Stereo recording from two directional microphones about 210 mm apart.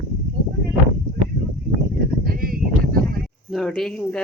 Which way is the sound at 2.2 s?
45° right (ahead or behind).